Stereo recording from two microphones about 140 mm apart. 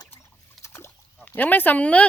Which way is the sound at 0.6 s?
20° left (ahead or behind).